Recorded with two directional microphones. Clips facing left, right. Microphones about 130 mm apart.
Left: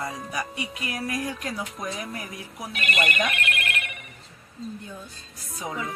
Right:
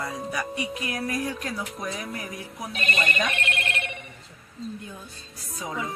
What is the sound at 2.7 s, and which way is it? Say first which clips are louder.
Speech: left 1 dB; 30° right (ahead or behind).